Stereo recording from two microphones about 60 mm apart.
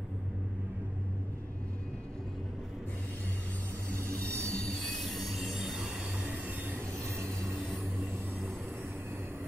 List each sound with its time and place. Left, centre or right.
4.2 s train: centre
6.2 s train: right